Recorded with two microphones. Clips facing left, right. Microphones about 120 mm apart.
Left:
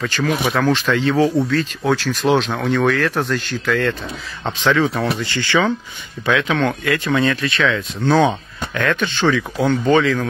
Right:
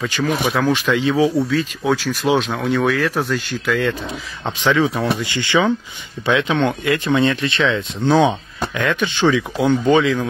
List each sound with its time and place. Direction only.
0.0 s speech: 10° right (ahead or behind)